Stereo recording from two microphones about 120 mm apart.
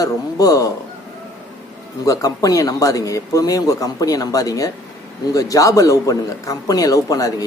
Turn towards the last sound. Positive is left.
turn(degrees=30)  # may be behind; listen again after turning